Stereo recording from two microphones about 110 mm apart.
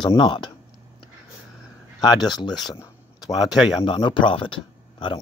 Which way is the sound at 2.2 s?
40° left (ahead or behind).